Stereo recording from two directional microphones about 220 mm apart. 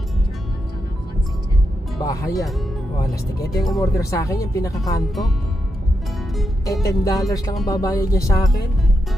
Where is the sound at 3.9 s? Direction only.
15° left (ahead or behind).